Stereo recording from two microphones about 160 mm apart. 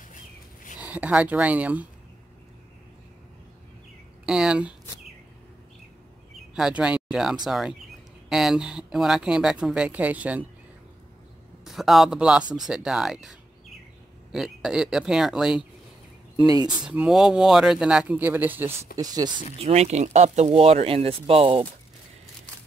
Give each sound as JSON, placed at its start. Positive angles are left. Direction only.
{"t": 0.7, "sound": "speech", "side_deg": -10}
{"t": 4.3, "sound": "speech", "side_deg": -5}
{"t": 6.5, "sound": "speech", "side_deg": -5}
{"t": 11.6, "sound": "speech", "side_deg": 0}
{"t": 16.4, "sound": "speech", "side_deg": -25}
{"t": 16.8, "sound": "speech", "side_deg": -5}
{"t": 18.9, "sound": "speech", "side_deg": -25}
{"t": 19.6, "sound": "speech", "side_deg": -40}